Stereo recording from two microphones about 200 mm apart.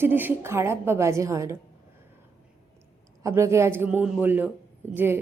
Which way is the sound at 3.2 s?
15° right (ahead or behind).